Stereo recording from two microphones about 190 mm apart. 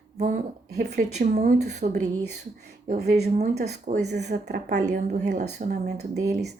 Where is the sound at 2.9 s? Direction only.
55° right (ahead or behind).